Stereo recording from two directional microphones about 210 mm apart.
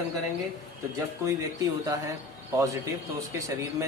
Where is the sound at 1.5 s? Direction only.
15° right (ahead or behind).